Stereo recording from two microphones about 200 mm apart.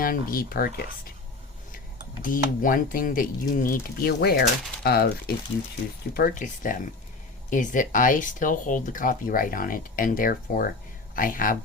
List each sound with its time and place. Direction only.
0.0 s speech: 45° left (ahead or behind)
2.2 s speech: 40° left (ahead or behind)